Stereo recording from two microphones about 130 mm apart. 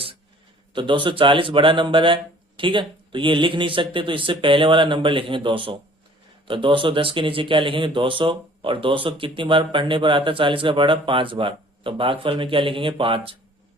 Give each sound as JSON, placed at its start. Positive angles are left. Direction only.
{"t": 0.7, "sound": "speech", "side_deg": -40}